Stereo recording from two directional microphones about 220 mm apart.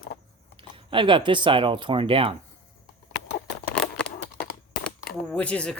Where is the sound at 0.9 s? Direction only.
20° right (ahead or behind).